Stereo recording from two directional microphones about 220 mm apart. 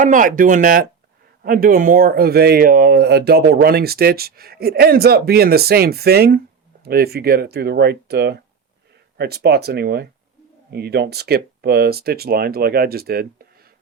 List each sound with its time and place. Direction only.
0.0 s speech: 35° right (ahead or behind)